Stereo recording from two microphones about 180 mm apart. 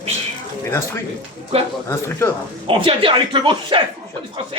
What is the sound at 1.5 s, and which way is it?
Speech, 35° right (ahead or behind).